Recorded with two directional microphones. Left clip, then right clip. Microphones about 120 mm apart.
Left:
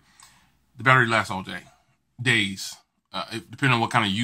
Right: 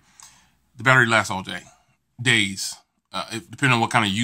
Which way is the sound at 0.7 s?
25° right (ahead or behind).